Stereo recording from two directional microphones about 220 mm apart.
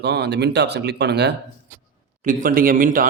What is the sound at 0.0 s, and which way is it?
Speech, 50° right (ahead or behind).